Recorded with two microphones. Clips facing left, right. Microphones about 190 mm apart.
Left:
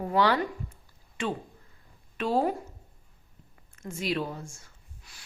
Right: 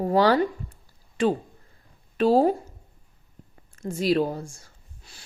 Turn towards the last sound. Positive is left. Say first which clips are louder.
# right 3 dB
turn(degrees=-30)  # may be behind; listen again after turning